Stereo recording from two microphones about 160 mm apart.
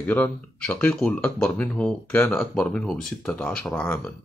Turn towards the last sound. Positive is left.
turn(degrees=10)  # may be behind; listen again after turning